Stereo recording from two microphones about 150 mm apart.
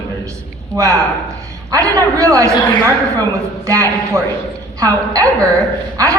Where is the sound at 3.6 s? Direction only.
20° right (ahead or behind).